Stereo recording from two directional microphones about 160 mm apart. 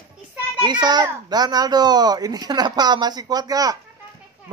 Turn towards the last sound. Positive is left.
turn(degrees=-25)  # may be behind; listen again after turning